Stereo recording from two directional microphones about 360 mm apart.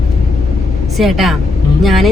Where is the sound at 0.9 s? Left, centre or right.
Centre.